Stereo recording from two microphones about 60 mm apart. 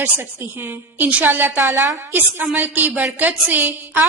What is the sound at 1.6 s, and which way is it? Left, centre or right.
Speech, right.